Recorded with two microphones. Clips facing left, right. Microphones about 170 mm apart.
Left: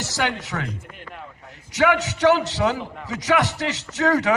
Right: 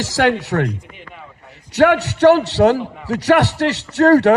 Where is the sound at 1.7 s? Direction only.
65° right (ahead or behind).